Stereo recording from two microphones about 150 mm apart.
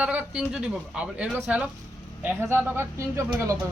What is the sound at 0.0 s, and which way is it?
Speech, 10° right (ahead or behind).